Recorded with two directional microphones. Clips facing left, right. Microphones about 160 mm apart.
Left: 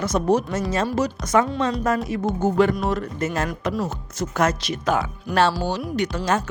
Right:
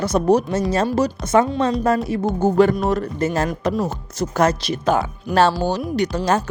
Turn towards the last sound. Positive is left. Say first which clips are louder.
# right 3 dB
turn(degrees=-35)  # may be behind; listen again after turning